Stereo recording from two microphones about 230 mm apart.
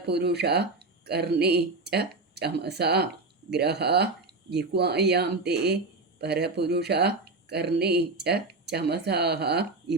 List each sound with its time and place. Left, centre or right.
0.0 s speech: right